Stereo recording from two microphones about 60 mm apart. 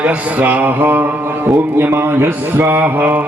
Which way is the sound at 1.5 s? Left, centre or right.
Right.